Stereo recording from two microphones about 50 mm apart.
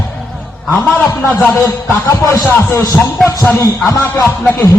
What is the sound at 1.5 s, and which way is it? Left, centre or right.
Speech, left.